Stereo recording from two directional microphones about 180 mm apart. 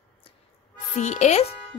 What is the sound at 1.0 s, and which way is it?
Speech, 40° left (ahead or behind).